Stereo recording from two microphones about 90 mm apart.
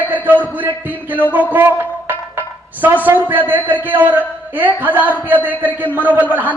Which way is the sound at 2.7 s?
20° right (ahead or behind).